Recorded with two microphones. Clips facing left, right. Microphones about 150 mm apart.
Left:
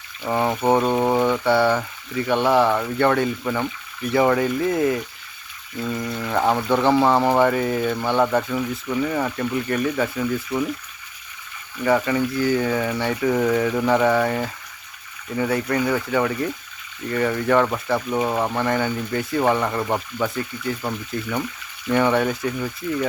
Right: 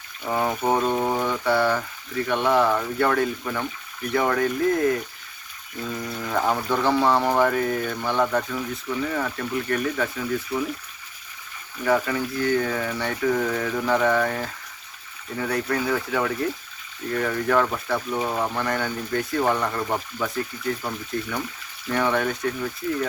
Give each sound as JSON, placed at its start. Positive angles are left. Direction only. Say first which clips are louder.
{"t": 0.3, "sound": "speech", "louder": "left 3 dB", "side_deg": 0}
{"t": 0.9, "sound": "speech", "louder": "left 4 dB", "side_deg": 15}
{"t": 1.3, "sound": "speech", "louder": "left 3 dB", "side_deg": 0}
{"t": 11.9, "sound": "speech", "louder": "left 3 dB", "side_deg": 0}